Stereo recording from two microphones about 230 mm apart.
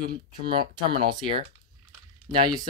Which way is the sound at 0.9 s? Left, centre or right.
Right.